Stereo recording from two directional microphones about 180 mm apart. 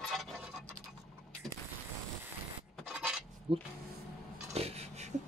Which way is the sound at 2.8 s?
5° right (ahead or behind).